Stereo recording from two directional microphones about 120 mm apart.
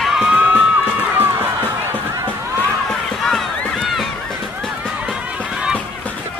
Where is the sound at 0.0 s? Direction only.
5° right (ahead or behind).